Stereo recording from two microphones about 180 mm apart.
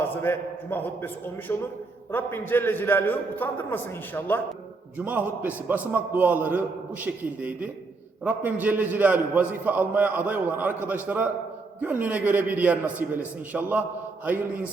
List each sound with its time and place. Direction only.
0.1 s a man's voice: 10° left (ahead or behind)
4.9 s a man's voice: 10° right (ahead or behind)